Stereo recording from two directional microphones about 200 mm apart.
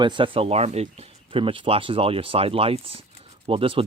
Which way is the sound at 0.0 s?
25° right (ahead or behind).